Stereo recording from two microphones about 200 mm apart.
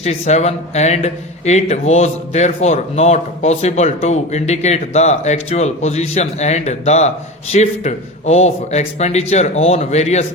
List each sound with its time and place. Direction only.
0.0 s speech: 35° left (ahead or behind)